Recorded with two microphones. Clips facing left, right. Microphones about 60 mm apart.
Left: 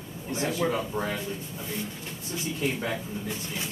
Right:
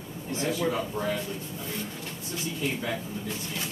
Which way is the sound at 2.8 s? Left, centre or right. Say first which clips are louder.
Left 1 dB; centre.